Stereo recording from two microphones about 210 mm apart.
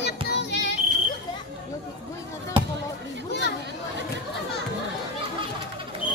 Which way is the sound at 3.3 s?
55° left (ahead or behind).